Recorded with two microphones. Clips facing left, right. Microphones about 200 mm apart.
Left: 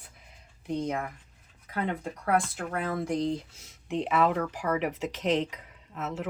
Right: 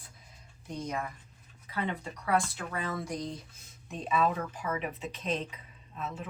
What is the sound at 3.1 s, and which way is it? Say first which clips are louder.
Speech: left 9 dB; 25° left (ahead or behind).